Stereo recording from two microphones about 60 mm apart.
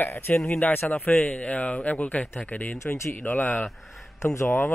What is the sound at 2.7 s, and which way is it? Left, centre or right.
Speech, left.